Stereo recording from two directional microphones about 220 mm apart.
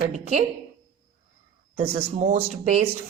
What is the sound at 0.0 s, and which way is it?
Speech, 30° right (ahead or behind).